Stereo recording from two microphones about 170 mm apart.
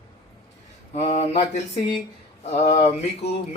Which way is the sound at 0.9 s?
40° left (ahead or behind).